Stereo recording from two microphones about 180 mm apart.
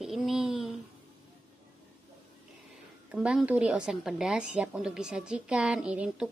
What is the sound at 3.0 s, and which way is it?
A woman's voice, 5° right (ahead or behind).